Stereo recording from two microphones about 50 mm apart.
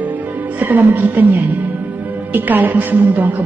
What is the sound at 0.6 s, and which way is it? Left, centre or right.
A woman's voice, right.